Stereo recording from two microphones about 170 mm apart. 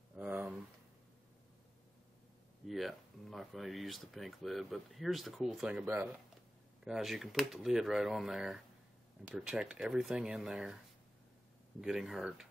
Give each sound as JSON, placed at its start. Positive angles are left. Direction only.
{"t": 0.1, "sound": "a sound", "side_deg": -10}
{"t": 2.6, "sound": "speech", "side_deg": 0}
{"t": 11.8, "sound": "speech", "side_deg": 0}